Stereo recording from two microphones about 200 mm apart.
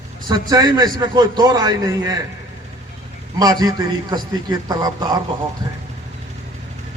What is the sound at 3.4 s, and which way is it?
A man's voice, 20° right (ahead or behind).